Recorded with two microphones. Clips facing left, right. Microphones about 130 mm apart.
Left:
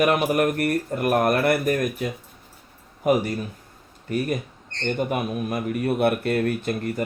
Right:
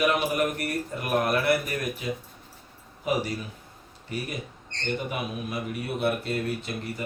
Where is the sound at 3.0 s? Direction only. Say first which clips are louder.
Left 7 dB; 50° left (ahead or behind).